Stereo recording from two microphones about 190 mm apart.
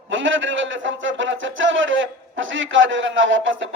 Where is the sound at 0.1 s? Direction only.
80° right.